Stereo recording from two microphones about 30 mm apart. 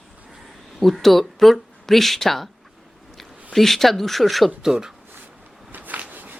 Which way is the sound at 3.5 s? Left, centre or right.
Centre.